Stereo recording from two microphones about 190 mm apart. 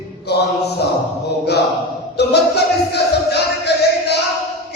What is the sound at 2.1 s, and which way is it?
Music, 60° left (ahead or behind).